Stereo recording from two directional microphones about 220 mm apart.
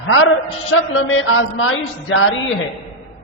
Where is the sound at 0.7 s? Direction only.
65° left (ahead or behind).